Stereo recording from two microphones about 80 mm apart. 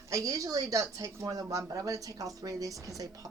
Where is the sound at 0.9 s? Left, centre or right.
Right.